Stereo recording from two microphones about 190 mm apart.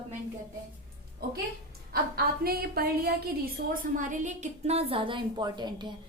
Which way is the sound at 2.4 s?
55° right (ahead or behind).